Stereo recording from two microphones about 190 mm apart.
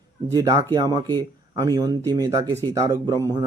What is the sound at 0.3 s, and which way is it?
Speech, 20° right (ahead or behind).